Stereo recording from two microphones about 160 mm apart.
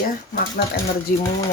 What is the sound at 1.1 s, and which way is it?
Speech, 65° left (ahead or behind).